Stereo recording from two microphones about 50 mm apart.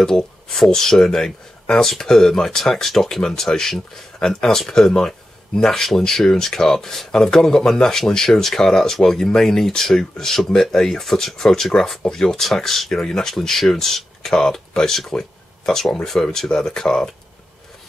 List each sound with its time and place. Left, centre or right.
0.0 s speech: centre